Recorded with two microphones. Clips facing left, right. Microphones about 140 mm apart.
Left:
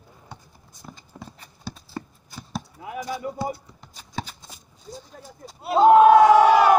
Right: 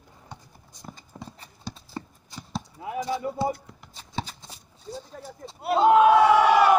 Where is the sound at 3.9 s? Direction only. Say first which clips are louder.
Even; 30° right (ahead or behind).